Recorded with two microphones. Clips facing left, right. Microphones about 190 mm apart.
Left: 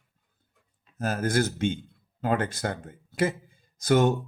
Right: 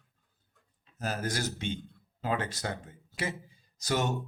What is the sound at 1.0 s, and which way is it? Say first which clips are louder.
Speech: left 8 dB; 50° left (ahead or behind).